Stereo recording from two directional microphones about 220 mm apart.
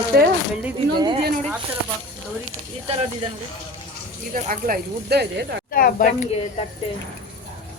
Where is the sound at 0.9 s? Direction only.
20° right (ahead or behind).